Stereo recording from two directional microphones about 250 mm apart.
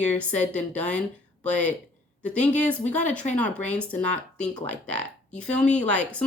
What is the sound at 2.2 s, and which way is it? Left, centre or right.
A woman's voice, centre.